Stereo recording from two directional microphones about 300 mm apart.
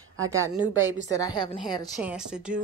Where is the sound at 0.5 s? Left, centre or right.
Centre.